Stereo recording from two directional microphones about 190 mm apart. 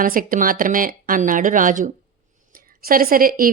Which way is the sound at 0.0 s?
45° right (ahead or behind).